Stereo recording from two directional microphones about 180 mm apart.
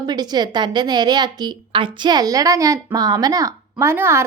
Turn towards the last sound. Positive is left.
turn(degrees=-15)  # may be behind; listen again after turning